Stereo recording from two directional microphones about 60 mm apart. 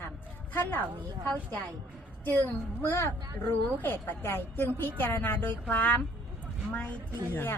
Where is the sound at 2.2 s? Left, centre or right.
Left.